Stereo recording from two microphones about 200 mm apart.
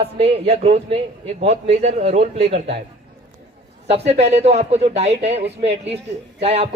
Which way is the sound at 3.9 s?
35° right (ahead or behind).